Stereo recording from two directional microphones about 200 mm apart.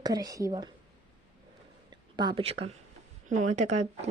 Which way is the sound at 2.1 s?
25° right (ahead or behind).